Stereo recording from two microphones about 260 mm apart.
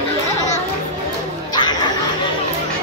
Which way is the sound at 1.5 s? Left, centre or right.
Centre.